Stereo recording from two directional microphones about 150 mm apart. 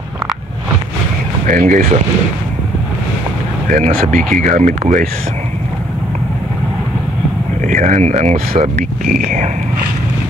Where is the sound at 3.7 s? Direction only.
65° right (ahead or behind).